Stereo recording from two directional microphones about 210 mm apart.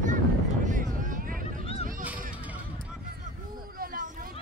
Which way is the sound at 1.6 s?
30° left (ahead or behind).